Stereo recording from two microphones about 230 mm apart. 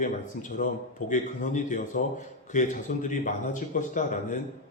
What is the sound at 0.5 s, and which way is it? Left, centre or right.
A man's voice, left.